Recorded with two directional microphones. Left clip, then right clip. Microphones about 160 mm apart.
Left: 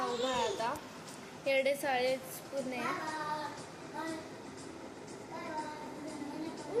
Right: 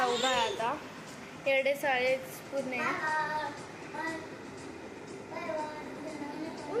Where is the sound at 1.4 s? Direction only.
20° left (ahead or behind).